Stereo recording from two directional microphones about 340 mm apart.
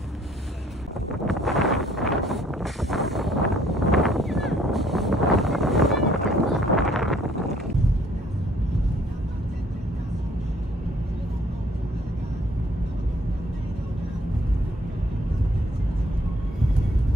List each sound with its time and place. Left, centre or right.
1.2 s vehicle: centre